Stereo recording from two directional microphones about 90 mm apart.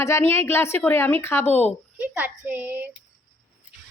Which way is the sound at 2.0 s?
20° right (ahead or behind).